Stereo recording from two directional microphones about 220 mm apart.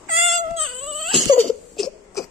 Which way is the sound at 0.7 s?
80° right.